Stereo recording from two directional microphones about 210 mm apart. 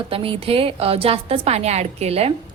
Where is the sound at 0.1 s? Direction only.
25° right (ahead or behind).